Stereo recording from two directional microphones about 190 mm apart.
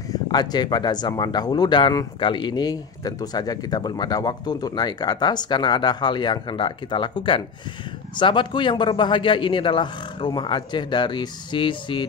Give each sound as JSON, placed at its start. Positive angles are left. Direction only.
{"t": 0.1, "sound": "speech", "side_deg": 20}